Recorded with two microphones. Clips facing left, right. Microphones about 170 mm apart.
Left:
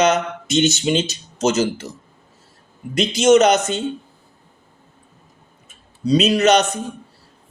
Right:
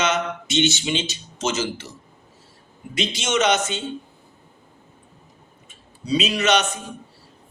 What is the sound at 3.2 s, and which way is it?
Speech, 40° left (ahead or behind).